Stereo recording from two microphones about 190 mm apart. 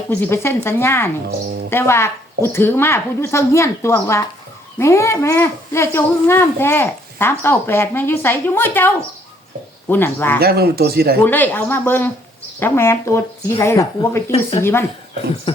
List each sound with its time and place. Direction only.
0.1 s speech: 10° left (ahead or behind)
10.4 s speech: 55° right (ahead or behind)
11.2 s speech: 10° left (ahead or behind)
15.5 s speech: 30° left (ahead or behind)